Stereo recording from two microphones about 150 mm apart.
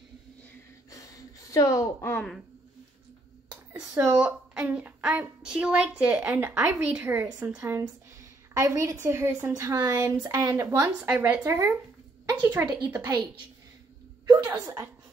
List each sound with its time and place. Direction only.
0.8 s a sound: 25° left (ahead or behind)
4.2 s a woman's voice: 5° right (ahead or behind)
7.8 s a sound: 20° right (ahead or behind)
9.0 s a woman's voice: 15° right (ahead or behind)
11.1 s a woman's voice: 10° right (ahead or behind)
14.4 s a woman's voice: 10° right (ahead or behind)